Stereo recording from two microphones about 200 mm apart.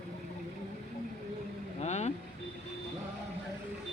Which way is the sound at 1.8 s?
35° left (ahead or behind).